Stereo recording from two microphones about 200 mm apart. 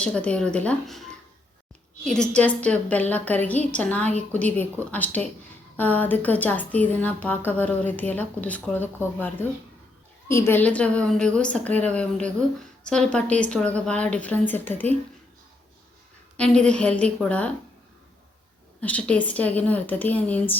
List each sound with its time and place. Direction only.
0.0 s a woman's voice: 5° left (ahead or behind)
2.0 s a woman's voice: 5° left (ahead or behind)
16.4 s a woman's voice: 5° left (ahead or behind)
18.8 s a woman's voice: 5° left (ahead or behind)